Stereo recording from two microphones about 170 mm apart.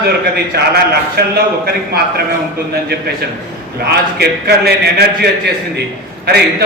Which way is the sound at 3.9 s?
70° right (ahead or behind).